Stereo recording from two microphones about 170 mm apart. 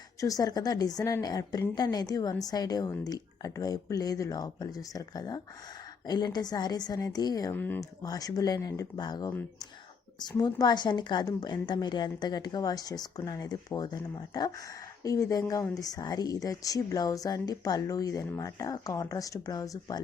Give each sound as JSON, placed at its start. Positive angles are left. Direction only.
{"t": 0.2, "sound": "a woman's voice", "side_deg": 20}
{"t": 7.5, "sound": "speech", "side_deg": 10}
{"t": 8.0, "sound": "a woman's voice", "side_deg": 20}